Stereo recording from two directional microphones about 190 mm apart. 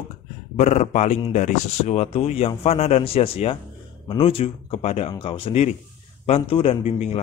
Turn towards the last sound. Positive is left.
turn(degrees=35)  # may be behind; listen again after turning